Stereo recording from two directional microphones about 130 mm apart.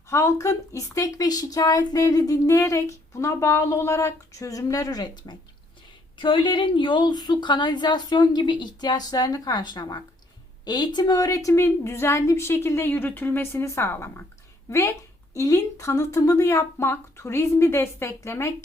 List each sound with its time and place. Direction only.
0.1 s a woman's voice: 20° left (ahead or behind)